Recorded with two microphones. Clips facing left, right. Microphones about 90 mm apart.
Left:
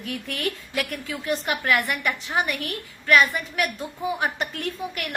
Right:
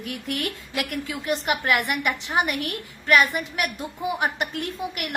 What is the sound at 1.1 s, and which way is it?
A woman's voice, 20° right (ahead or behind).